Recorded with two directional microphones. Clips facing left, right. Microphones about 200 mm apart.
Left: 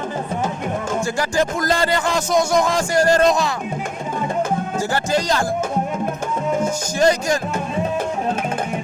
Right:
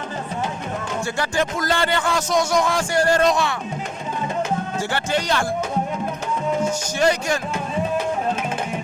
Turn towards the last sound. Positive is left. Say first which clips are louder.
# left 3 dB
turn(degrees=40)  # may be behind; listen again after turning